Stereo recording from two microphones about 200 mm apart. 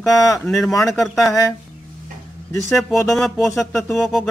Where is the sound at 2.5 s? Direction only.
Centre (ahead or behind).